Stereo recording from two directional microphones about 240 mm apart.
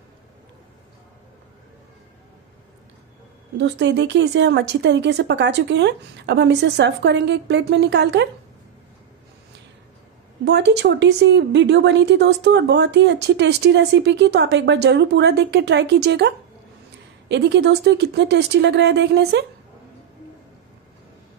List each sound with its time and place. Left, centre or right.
3.5 s speech: right
10.4 s speech: right